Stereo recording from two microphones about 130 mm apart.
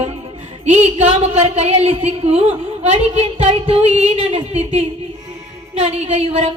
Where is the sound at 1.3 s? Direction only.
50° right (ahead or behind).